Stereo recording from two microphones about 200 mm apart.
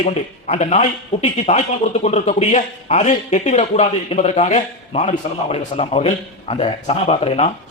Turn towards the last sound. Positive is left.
turn(degrees=30)  # may be behind; listen again after turning